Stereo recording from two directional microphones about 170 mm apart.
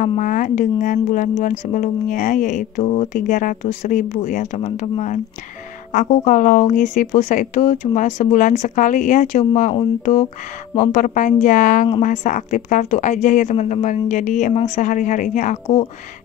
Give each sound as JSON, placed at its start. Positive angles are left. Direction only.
{"t": 0.0, "sound": "speech", "side_deg": 50}